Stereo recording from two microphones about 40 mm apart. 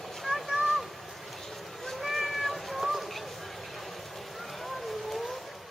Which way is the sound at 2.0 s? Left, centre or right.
Centre.